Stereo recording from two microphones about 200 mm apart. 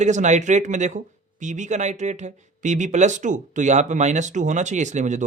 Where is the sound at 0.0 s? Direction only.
35° right (ahead or behind).